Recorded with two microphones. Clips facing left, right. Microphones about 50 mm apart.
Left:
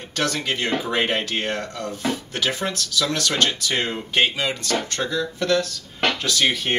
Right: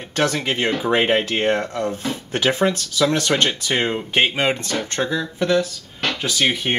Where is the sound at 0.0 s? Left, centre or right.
Right.